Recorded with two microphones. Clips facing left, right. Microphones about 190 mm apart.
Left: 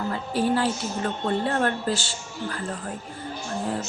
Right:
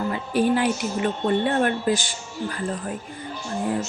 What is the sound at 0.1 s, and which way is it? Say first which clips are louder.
Speech: right 3 dB; 15° right (ahead or behind).